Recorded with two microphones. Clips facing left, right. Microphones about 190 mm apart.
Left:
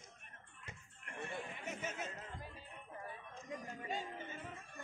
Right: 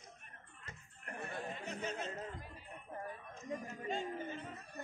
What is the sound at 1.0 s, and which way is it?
Chatter, 40° right (ahead or behind).